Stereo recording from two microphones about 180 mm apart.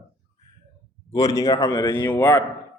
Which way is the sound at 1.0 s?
20° left (ahead or behind).